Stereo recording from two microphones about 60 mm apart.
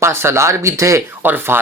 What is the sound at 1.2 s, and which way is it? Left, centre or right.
Speech, right.